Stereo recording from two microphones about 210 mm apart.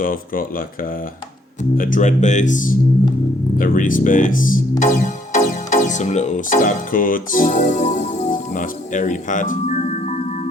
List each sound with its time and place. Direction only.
0.0 s speech: 40° left (ahead or behind)
1.7 s speech: 40° left (ahead or behind)
4.8 s music: 35° left (ahead or behind)